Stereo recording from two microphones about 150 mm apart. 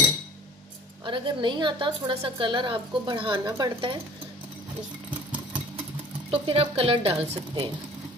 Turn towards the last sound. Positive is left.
turn(degrees=-35)  # may be behind; listen again after turning